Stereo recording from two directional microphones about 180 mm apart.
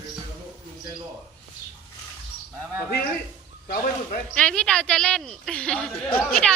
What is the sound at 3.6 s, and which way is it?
Speech, 50° left (ahead or behind).